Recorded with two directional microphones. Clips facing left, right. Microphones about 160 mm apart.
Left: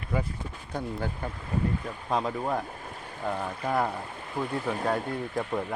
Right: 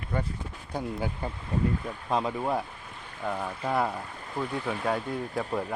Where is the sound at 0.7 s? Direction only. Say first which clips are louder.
Right 1 dB; 10° right (ahead or behind).